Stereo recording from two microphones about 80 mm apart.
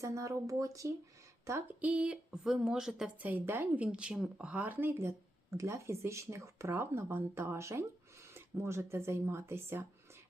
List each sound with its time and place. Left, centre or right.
0.0 s speech: right
1.6 s speech: centre
3.2 s a woman's voice: right
3.8 s speech: centre; by 9.8 s right